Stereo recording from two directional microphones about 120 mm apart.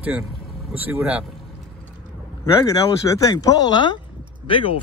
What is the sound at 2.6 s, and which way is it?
Speech, 25° left (ahead or behind).